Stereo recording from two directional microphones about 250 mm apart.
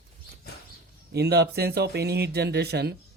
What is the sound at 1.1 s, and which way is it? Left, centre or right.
A man's voice, right.